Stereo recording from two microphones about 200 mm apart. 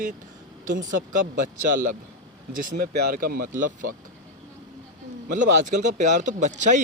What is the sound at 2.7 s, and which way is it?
Speech, 50° right (ahead or behind).